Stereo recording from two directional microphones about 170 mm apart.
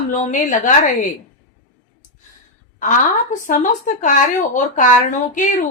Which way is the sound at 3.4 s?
50° left (ahead or behind).